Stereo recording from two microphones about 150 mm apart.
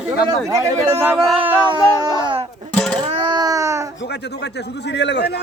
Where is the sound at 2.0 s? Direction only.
30° right (ahead or behind).